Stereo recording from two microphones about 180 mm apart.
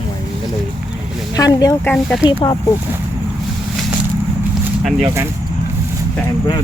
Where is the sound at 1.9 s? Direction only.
5° left (ahead or behind).